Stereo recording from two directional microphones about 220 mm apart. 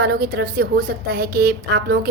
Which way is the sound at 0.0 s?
45° right (ahead or behind).